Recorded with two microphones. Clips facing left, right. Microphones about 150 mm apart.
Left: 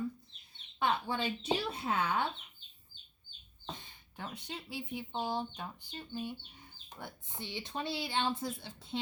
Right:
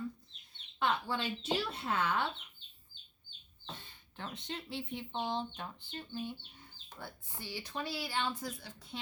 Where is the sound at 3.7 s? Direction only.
10° left (ahead or behind).